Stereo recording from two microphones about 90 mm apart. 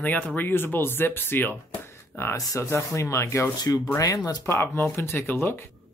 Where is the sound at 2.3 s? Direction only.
35° left (ahead or behind).